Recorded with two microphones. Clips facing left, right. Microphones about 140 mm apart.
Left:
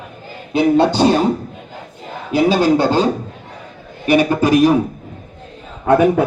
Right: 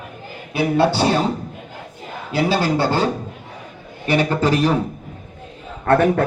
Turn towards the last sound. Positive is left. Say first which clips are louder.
# left 3 dB
turn(degrees=10)  # may be behind; listen again after turning